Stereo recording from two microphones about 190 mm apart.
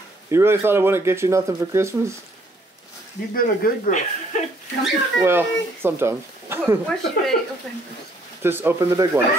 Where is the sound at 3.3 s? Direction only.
50° left (ahead or behind).